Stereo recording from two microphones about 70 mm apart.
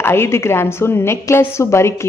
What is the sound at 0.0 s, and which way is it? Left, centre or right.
A woman's voice, left.